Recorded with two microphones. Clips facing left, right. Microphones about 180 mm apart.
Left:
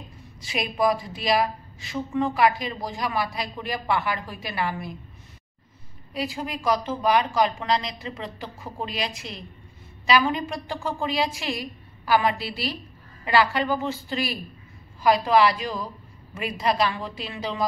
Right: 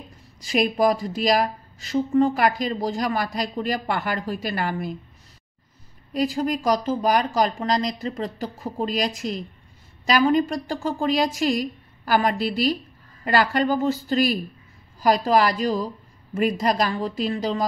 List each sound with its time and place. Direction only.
0.5 s a woman's voice: 40° right (ahead or behind)
6.1 s a woman's voice: 40° right (ahead or behind)